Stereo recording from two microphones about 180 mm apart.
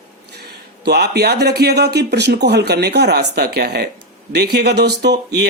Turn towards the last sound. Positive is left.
turn(degrees=-65)  # may be behind; listen again after turning